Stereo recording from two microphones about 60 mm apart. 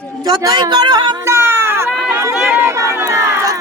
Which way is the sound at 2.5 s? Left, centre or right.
Right.